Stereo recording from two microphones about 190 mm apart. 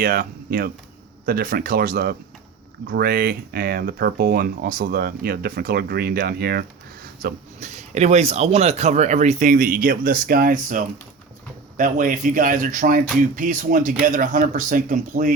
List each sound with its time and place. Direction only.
0.0 s speech: 50° right (ahead or behind)
7.2 s speech: 45° right (ahead or behind)